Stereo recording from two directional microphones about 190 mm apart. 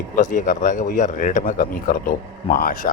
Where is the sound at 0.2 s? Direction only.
45° left (ahead or behind).